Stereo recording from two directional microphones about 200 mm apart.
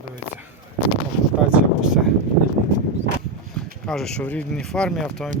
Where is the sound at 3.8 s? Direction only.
Centre (ahead or behind).